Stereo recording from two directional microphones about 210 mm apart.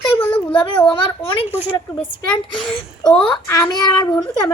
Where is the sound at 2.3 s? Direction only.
5° left (ahead or behind).